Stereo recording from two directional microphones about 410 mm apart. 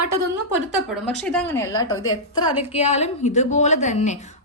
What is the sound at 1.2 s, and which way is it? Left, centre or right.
A woman's voice, centre.